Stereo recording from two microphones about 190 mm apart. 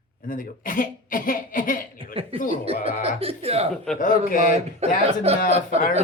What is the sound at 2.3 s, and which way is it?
Speech, 45° left (ahead or behind).